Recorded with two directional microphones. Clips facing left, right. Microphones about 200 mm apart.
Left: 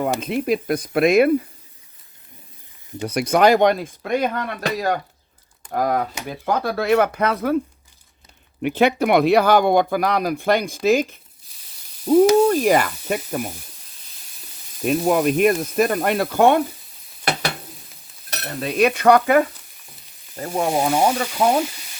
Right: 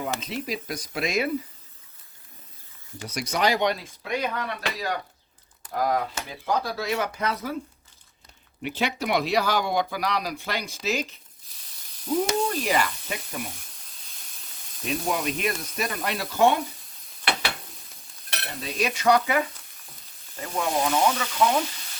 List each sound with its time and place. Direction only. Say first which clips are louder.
0.2 s speech: left 10 dB; 55° left (ahead or behind)
3.0 s speech: left 9 dB; 60° left (ahead or behind)
8.6 s speech: left 10 dB; 55° left (ahead or behind)
14.8 s speech: left 10 dB; 50° left (ahead or behind)
17.3 s stir: left 5 dB; 40° left (ahead or behind)
18.3 s speech: left 8 dB; 50° left (ahead or behind)
20.3 s speech: left 6 dB; 40° left (ahead or behind)